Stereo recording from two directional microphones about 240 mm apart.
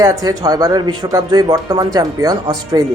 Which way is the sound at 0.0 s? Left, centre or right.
Centre.